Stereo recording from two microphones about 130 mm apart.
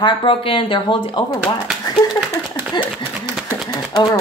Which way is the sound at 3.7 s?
30° left (ahead or behind).